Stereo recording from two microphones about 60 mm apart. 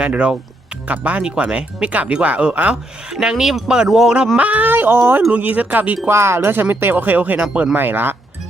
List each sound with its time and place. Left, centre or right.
0.0 s speech: centre
3.1 s speech: centre
4.4 s speech: right
6.1 s speech: right
7.8 s speech: right